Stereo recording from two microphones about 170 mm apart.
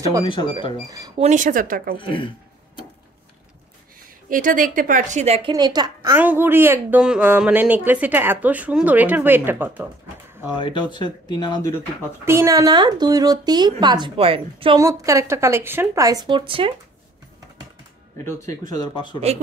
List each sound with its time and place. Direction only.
0.2 s speech: 30° left (ahead or behind)
0.8 s a woman's voice: 20° right (ahead or behind)
1.1 s speech: 40° right (ahead or behind)
2.0 s speech: 30° left (ahead or behind)
4.3 s speech: 55° right (ahead or behind); by 5.5 s 35° right (ahead or behind)
5.5 s a woman's voice: 25° right (ahead or behind)
6.1 s speech: 10° right (ahead or behind)
10.5 s speech: 30° left (ahead or behind)
12.3 s a woman's voice: 15° right (ahead or behind); by 14.8 s 30° right (ahead or behind)
14.8 s a woman's voice: 20° right (ahead or behind)
18.1 s speech: 15° left (ahead or behind)